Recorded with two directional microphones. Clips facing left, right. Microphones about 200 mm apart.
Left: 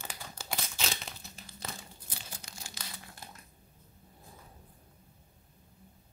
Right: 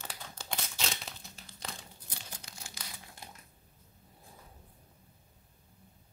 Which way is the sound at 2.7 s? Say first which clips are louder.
Left 2 dB; 20° right (ahead or behind).